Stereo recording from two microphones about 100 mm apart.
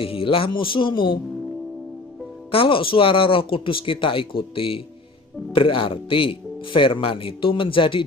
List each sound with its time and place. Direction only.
0.0 s speech: 65° left (ahead or behind)
2.5 s speech: 65° left (ahead or behind)